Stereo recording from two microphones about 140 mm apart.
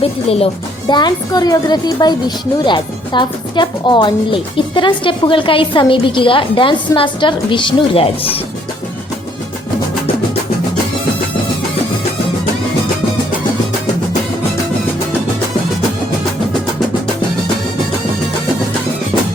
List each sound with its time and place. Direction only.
0.0 s speech: 45° left (ahead or behind)
0.9 s a woman's voice: 30° left (ahead or behind)